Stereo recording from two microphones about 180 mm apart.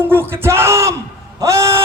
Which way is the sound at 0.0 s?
10° right (ahead or behind).